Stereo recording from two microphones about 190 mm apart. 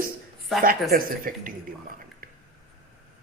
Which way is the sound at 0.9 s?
50° right (ahead or behind).